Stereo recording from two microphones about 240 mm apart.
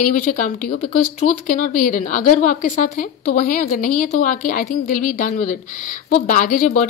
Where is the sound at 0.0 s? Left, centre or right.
Left.